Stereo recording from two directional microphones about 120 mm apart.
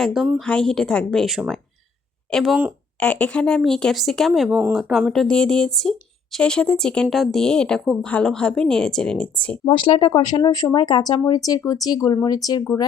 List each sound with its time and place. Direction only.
0.0 s speech: 5° right (ahead or behind)
0.3 s speech: 10° left (ahead or behind)
4.3 s speech: 10° right (ahead or behind); by 9.6 s 10° left (ahead or behind)
9.6 s speech: 40° left (ahead or behind)